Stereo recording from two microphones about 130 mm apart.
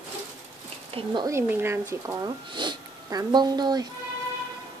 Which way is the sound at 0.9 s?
50° right (ahead or behind).